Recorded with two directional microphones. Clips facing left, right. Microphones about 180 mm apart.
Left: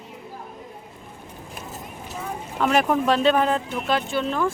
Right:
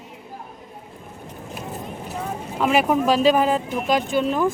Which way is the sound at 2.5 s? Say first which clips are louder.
Right 1 dB; 5° right (ahead or behind).